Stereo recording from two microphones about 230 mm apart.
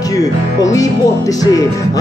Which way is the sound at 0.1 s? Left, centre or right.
Centre.